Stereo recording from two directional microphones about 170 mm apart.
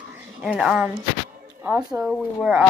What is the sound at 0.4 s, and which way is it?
A woman's voice, 5° right (ahead or behind).